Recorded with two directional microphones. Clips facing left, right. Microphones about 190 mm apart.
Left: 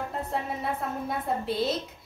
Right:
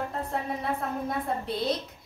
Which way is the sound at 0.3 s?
Centre (ahead or behind).